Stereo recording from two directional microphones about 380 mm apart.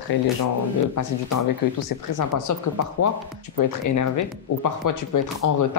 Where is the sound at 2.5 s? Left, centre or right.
Left.